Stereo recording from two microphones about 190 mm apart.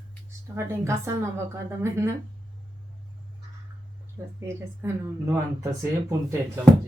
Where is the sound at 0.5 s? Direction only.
15° right (ahead or behind).